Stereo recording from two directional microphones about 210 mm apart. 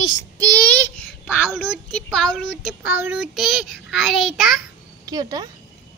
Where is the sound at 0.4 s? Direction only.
5° left (ahead or behind).